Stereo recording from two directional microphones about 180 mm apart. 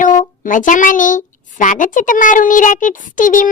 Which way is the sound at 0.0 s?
45° left (ahead or behind).